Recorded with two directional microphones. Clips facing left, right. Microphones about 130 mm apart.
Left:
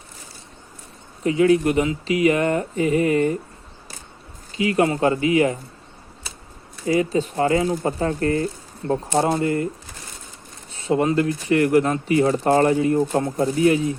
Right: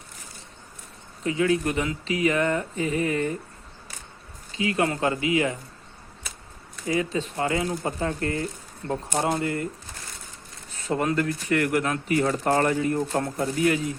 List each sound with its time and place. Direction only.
1.2 s speech: 25° left (ahead or behind)
4.7 s speech: 30° left (ahead or behind)
6.8 s speech: 35° left (ahead or behind)
10.8 s speech: 15° left (ahead or behind)
11.1 s speech: 25° left (ahead or behind)